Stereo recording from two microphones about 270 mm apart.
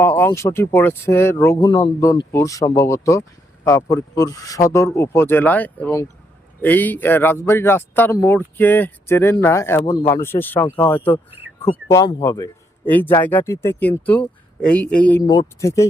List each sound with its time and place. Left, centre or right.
0.0 s speech: centre